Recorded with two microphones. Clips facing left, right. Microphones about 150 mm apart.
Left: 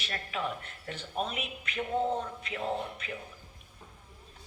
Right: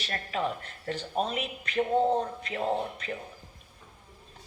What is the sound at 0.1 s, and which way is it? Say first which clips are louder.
Speech: right 4 dB; 40° right (ahead or behind).